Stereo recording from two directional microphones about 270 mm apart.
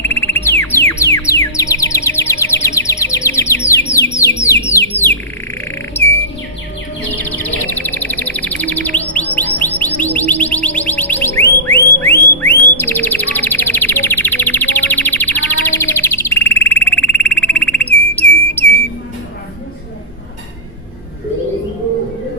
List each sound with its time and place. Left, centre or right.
0.0 s music: centre
3.7 s bird: centre
7.1 s chirp: centre
10.0 s music: centre
11.6 s bird: centre